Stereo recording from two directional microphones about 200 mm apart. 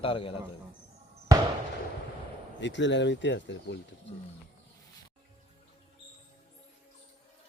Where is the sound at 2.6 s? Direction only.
65° left (ahead or behind).